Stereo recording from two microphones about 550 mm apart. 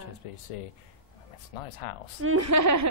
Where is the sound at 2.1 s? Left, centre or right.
Right.